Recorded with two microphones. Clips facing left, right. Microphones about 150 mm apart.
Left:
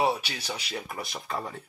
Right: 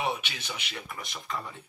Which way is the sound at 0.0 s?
35° left (ahead or behind).